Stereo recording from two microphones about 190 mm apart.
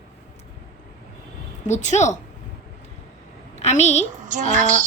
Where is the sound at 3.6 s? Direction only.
35° left (ahead or behind).